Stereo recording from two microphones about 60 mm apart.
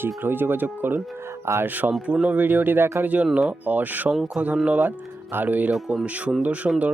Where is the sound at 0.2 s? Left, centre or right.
Right.